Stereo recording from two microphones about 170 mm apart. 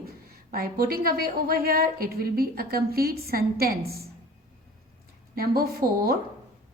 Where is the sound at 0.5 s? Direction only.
60° right (ahead or behind).